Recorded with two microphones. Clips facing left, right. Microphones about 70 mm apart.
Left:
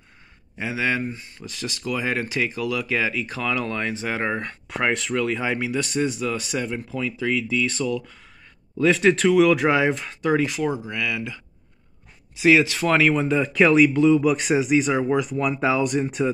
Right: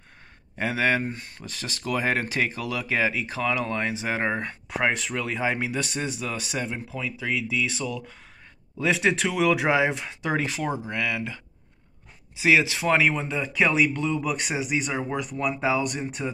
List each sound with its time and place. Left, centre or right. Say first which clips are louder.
0.6 s speech: right 1 dB; right
1.1 s speech: left 1 dB; right
1.5 s speech: left 1 dB; right; by 10.3 s centre
10.3 s speech: left 4 dB; right
12.4 s speech: left 4 dB; right
13.1 s speech: left 7 dB; centre